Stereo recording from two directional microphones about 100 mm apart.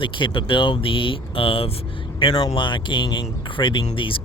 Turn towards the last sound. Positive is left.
turn(degrees=60)  # may be behind; listen again after turning